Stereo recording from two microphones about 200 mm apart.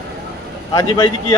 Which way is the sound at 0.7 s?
20° left (ahead or behind).